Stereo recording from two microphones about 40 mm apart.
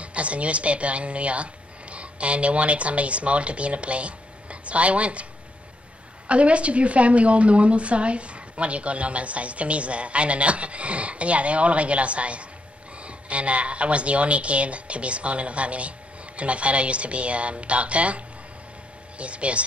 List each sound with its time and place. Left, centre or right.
0.0 s a woman's voice: right
6.2 s a woman's voice: right